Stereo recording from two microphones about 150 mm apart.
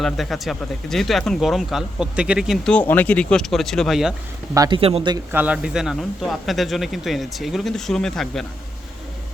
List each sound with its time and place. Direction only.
0.0 s speech: centre (ahead or behind)
2.7 s speech: 10° left (ahead or behind)
4.5 s speech: 25° right (ahead or behind)
4.8 s speech: 40° right (ahead or behind)
5.3 s speech: 10° right (ahead or behind)